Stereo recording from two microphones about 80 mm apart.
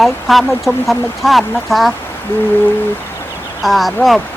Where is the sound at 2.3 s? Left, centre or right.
Left.